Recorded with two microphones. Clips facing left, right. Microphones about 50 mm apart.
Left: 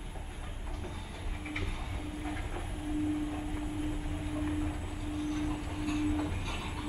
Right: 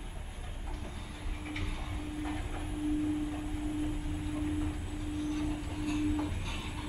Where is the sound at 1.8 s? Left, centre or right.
Centre.